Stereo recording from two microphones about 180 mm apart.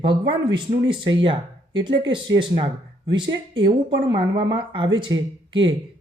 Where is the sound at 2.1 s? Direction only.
25° right (ahead or behind).